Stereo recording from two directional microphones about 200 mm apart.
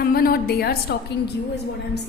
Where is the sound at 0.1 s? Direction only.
50° left (ahead or behind).